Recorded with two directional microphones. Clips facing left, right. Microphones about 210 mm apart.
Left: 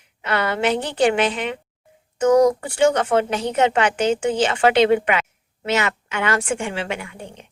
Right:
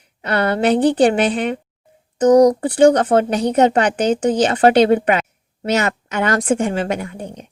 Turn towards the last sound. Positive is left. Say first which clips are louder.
# right 6 dB
turn(degrees=-40)  # may be behind; listen again after turning